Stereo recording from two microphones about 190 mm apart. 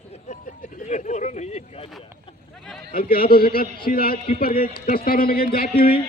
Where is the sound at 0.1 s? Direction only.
40° left (ahead or behind).